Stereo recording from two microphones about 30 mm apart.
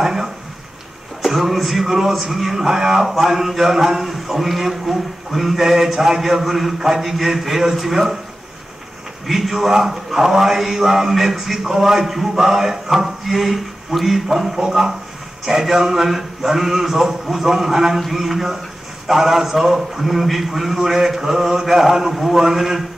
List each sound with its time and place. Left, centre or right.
0.0 s a sound: centre
1.2 s a man's voice: centre
5.6 s a man's voice: centre
6.4 s a man's voice: centre
9.3 s a man's voice: centre
20.1 s a man's voice: centre